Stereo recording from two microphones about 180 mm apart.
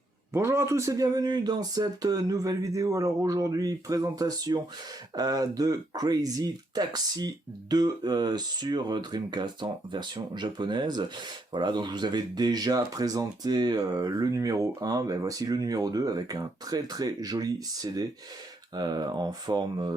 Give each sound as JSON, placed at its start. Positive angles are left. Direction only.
{"t": 0.3, "sound": "speech", "side_deg": -15}
{"t": 18.7, "sound": "speech", "side_deg": -20}